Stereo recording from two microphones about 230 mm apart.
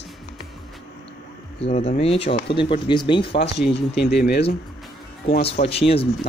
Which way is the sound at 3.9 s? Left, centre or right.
Left.